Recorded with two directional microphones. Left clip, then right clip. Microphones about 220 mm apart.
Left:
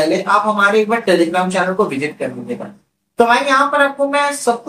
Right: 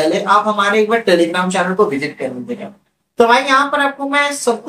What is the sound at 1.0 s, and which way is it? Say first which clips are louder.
Speech: right 1 dB; 5° right (ahead or behind).